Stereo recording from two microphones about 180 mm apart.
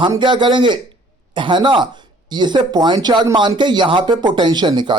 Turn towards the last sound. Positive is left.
turn(degrees=-25)  # may be behind; listen again after turning